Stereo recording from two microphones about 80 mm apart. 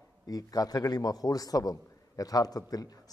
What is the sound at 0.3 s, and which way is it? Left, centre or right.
A man's voice, left.